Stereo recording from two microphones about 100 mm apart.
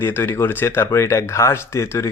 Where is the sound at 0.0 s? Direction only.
25° left (ahead or behind).